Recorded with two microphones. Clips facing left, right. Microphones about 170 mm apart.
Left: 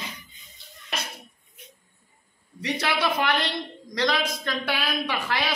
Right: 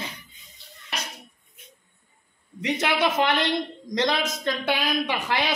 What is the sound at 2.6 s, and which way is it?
A man's voice, 20° right (ahead or behind).